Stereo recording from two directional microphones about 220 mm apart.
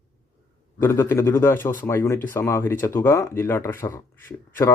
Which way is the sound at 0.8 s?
10° left (ahead or behind).